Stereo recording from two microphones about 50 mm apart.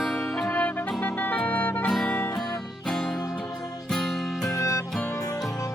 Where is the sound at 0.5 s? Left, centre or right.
Left.